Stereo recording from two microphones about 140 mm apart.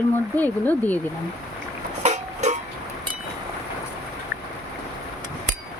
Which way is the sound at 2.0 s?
55° right (ahead or behind).